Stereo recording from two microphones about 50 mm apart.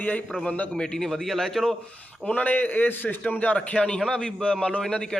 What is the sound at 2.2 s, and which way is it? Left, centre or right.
A man's voice, left.